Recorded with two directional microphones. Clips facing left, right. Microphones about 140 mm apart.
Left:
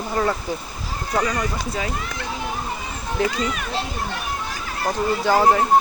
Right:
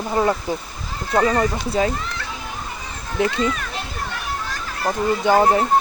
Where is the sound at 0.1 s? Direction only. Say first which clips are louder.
Right 3 dB; 20° right (ahead or behind).